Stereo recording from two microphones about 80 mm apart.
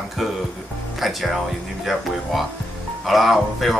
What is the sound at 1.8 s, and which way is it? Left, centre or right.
Speech, centre.